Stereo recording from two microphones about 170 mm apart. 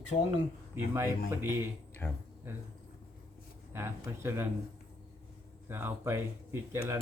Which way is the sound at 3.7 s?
15° right (ahead or behind).